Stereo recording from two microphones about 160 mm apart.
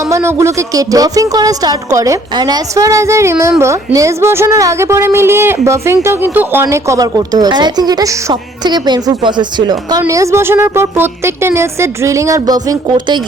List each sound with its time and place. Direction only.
0.1 s a woman's voice: 15° right (ahead or behind)